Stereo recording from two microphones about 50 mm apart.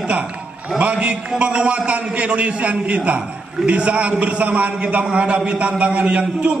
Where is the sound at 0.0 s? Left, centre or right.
Right.